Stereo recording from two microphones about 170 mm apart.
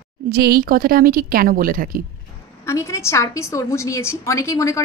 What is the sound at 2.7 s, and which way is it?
A woman's voice, 15° left (ahead or behind).